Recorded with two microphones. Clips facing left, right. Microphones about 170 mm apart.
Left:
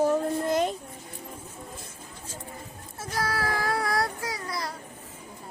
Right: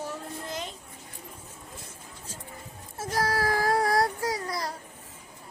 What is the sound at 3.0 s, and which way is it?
Child singing, 40° right (ahead or behind).